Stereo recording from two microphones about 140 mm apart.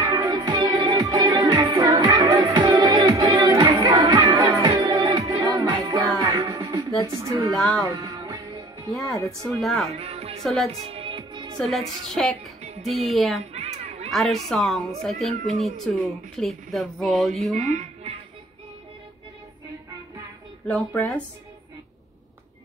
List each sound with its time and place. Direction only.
0.0 s music: 30° right (ahead or behind)
7.2 s a woman's voice: 20° right (ahead or behind)
7.5 s speech: centre (ahead or behind)
8.0 s music: 30° right (ahead or behind)
9.0 s speech: 25° left (ahead or behind)
9.4 s speech: centre (ahead or behind)
9.9 s music: 45° right (ahead or behind)
10.4 s speech: centre (ahead or behind)
10.9 s music: 40° right (ahead or behind)
11.7 s speech: centre (ahead or behind)
13.5 s a sound: 50° right (ahead or behind)
14.1 s speech: centre (ahead or behind)
17.6 s speech: 55° right (ahead or behind)
20.6 s speech: centre (ahead or behind)